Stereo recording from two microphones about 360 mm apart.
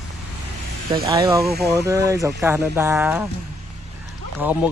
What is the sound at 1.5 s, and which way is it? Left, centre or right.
Speech, right.